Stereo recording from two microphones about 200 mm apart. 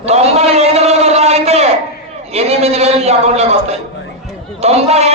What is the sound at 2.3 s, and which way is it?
A man's voice, 30° right (ahead or behind).